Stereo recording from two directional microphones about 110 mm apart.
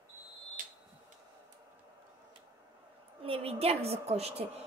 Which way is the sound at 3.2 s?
65° right (ahead or behind).